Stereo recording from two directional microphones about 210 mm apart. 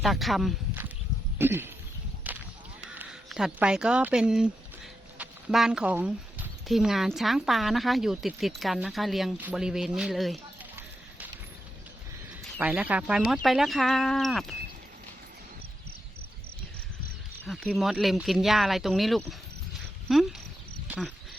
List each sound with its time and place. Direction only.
0.0 s speech: centre (ahead or behind)
1.4 s speech: 10° right (ahead or behind)
2.3 s whip: 10° right (ahead or behind)
2.9 s speech: 5° right (ahead or behind)
12.5 s speech: 5° right (ahead or behind)
17.4 s speech: 5° left (ahead or behind)